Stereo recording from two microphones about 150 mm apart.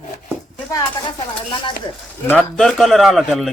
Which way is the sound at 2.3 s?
5° left (ahead or behind).